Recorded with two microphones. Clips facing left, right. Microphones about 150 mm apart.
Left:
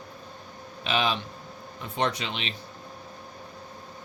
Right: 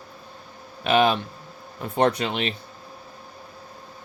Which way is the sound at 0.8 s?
55° right (ahead or behind).